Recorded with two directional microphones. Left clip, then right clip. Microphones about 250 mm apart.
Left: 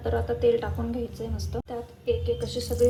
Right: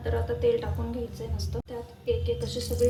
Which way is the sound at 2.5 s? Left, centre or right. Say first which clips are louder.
Left 2 dB; centre.